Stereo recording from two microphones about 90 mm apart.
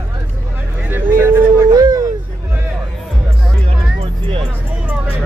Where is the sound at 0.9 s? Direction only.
25° right (ahead or behind).